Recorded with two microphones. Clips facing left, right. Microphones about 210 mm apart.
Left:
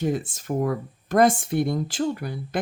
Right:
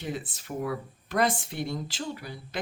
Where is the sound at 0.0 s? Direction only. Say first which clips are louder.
Left 9 dB; 45° left (ahead or behind).